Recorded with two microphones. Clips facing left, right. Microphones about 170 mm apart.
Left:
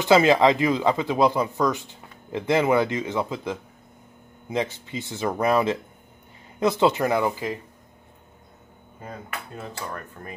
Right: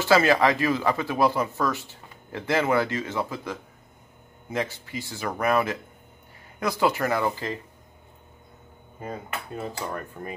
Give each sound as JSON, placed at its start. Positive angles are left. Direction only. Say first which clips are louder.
{"t": 0.0, "sound": "speech", "louder": "left 3 dB", "side_deg": 20}
{"t": 9.6, "sound": "dishes", "louder": "right 4 dB", "side_deg": -10}